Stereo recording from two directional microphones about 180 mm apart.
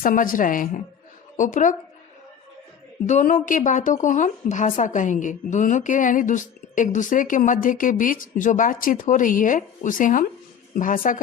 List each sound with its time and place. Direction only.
0.0 s a woman's voice: 50° left (ahead or behind)
3.1 s a woman's voice: 45° left (ahead or behind)